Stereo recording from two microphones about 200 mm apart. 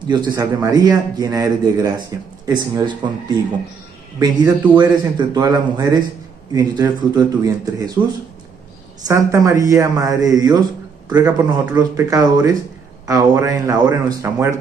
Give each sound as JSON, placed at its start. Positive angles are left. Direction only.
{"t": 0.1, "sound": "a man's voice", "side_deg": -20}
{"t": 9.0, "sound": "speech", "side_deg": -15}